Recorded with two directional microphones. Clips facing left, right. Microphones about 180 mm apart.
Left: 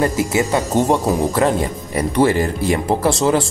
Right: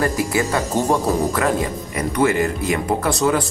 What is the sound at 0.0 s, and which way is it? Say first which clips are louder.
Speech: left 2 dB; 25° left (ahead or behind).